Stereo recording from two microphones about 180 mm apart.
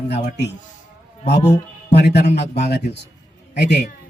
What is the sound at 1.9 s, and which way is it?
Speech, 70° left (ahead or behind).